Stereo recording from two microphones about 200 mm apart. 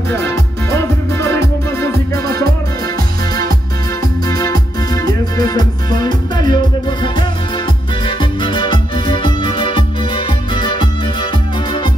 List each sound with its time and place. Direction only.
0.7 s music: 15° left (ahead or behind)
4.3 s music: 20° left (ahead or behind)